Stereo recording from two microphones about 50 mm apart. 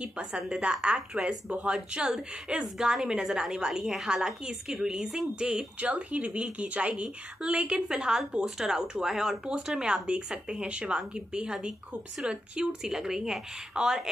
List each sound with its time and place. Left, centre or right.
0.0 s a woman's voice: right
5.8 s a woman's voice: right
12.8 s a woman's voice: centre